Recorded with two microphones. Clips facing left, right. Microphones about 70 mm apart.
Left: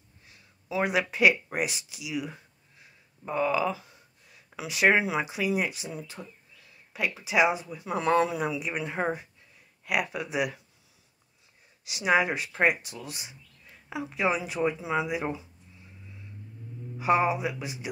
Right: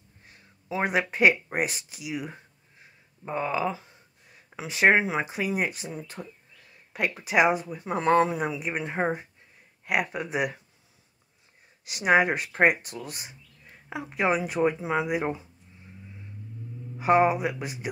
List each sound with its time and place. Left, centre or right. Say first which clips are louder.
0.2 s a sound: right 3 dB; right
4.6 s speech: right 2 dB; right
6.2 s speech: right 3 dB; centre
6.9 s speech: right 2 dB; right
11.8 s speech: right 3 dB; right
17.0 s speech: right 3 dB; right